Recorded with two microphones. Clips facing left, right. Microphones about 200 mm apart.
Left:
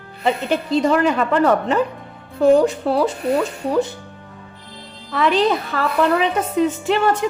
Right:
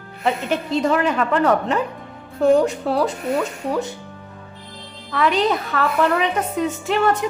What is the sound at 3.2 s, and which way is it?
Speech, 35° left (ahead or behind).